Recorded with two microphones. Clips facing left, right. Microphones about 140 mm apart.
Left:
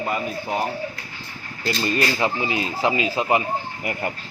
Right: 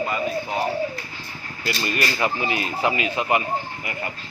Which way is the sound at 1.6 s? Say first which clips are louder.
Left 3 dB; 30° left (ahead or behind).